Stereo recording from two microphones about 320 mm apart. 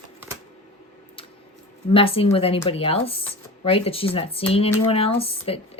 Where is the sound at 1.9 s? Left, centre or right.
Centre.